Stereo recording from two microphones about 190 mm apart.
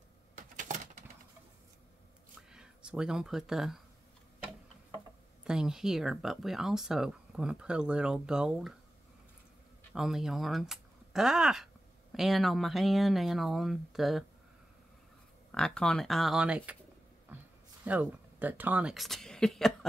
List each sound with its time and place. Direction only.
0.4 s a sound: 40° right (ahead or behind)
2.5 s speech: 5° right (ahead or behind)
5.4 s speech: 5° right (ahead or behind)
9.9 s speech: centre (ahead or behind)
15.5 s speech: 5° left (ahead or behind)
17.3 s a sound: 10° right (ahead or behind)
17.8 s speech: 10° right (ahead or behind)